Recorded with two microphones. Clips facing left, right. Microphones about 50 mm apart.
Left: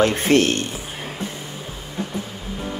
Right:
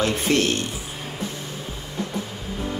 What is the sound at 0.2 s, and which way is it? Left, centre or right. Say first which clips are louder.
Speech: left 4 dB; left.